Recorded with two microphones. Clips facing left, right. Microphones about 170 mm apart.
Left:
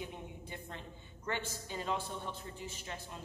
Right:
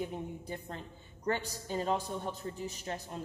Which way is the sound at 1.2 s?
40° right (ahead or behind).